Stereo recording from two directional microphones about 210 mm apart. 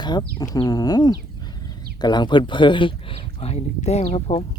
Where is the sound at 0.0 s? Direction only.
20° left (ahead or behind).